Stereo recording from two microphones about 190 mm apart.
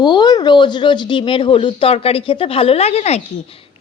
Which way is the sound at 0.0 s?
20° left (ahead or behind).